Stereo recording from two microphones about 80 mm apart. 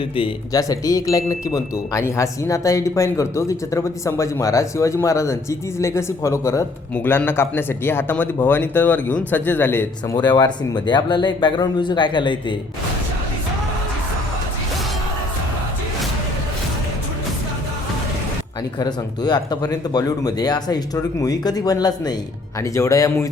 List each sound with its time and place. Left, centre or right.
0.5 s speech: left
6.9 s speech: left
10.2 s speech: left
18.8 s speech: left
22.6 s speech: left